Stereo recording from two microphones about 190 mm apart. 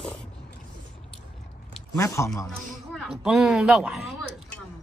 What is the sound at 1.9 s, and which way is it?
Speech, 15° left (ahead or behind).